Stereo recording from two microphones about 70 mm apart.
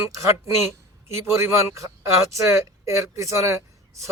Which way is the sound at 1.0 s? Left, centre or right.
Right.